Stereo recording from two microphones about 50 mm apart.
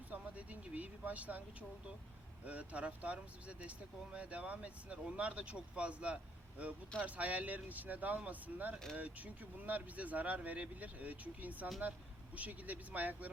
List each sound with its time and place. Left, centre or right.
0.1 s speech: right